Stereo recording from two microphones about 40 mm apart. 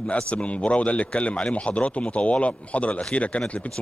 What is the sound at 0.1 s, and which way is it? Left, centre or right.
A man's voice, left.